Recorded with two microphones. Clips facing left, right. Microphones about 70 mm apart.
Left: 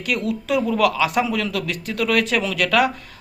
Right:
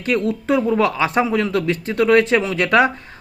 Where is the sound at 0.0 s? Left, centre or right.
Right.